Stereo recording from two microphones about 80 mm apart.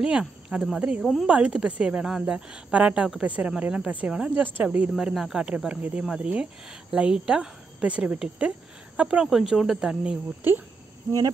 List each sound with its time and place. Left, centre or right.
0.0 s speech: centre
4.9 s speech: centre